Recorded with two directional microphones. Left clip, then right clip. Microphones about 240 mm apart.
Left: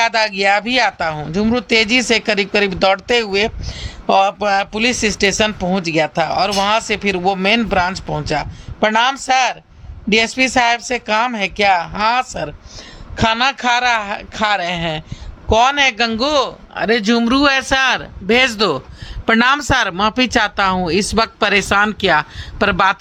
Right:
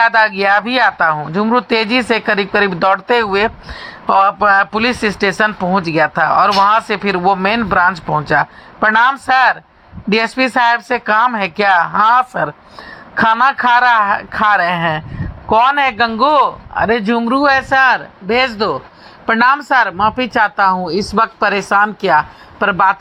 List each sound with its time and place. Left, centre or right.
0.0 s speech: centre
17.3 s a woman's voice: left
17.6 s a woman's voice: left
21.8 s speech: left